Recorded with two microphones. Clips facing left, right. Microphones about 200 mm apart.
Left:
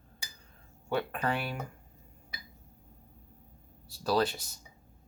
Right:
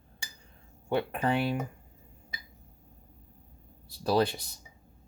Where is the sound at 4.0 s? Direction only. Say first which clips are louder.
Right 2 dB; 20° right (ahead or behind).